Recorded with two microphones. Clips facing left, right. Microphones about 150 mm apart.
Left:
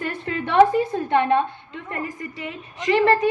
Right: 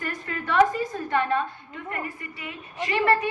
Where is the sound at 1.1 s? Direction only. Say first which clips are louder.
Left 6 dB; 20° left (ahead or behind).